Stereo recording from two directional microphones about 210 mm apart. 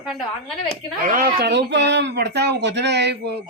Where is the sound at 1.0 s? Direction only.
45° right (ahead or behind).